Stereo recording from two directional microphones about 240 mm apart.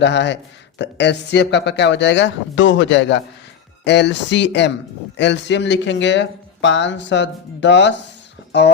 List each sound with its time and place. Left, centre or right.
0.0 s speech: left